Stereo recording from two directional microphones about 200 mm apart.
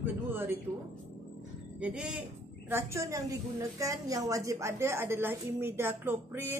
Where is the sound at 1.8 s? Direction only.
5° right (ahead or behind).